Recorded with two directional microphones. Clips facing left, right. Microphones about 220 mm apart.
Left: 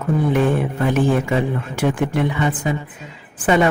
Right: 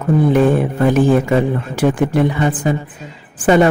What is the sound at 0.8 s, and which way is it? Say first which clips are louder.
A man's voice: right 5 dB; 35° right (ahead or behind).